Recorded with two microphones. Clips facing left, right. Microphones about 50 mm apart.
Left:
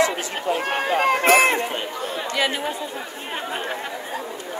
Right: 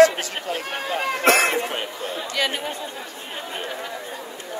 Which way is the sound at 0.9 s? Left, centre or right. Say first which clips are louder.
Left 5 dB; left.